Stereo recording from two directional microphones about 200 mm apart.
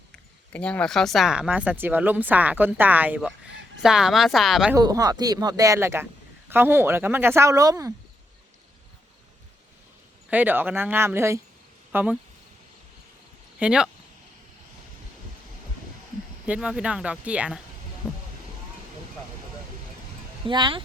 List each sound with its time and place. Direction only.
0.5 s speech: 5° left (ahead or behind)
4.7 s speech: 20° right (ahead or behind)
10.2 s speech: 10° right (ahead or behind)
13.6 s speech: 5° right (ahead or behind)
16.5 s speech: 5° right (ahead or behind)
18.0 s a sound: 10° left (ahead or behind)
20.5 s speech: 25° right (ahead or behind)